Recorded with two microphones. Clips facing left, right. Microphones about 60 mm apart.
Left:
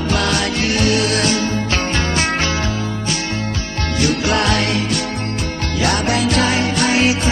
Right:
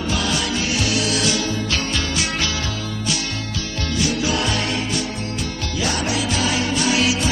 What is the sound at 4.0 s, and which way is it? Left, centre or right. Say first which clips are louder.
Music: left 5 dB; left.